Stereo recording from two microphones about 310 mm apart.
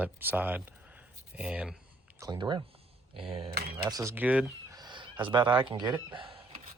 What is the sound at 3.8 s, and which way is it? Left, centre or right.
Speech, centre.